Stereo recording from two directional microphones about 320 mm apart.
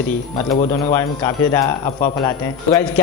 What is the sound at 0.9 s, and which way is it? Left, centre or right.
Speech, centre.